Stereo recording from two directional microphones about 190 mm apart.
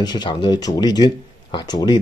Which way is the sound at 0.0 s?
20° left (ahead or behind).